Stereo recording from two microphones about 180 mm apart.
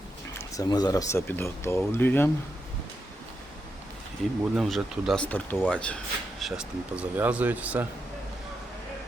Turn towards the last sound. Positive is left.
turn(degrees=-10)  # may be behind; listen again after turning